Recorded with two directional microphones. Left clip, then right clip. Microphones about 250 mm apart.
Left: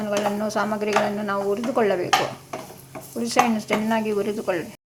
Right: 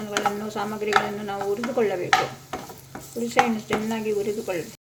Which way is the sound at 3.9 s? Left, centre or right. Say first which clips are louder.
Left 3 dB; centre.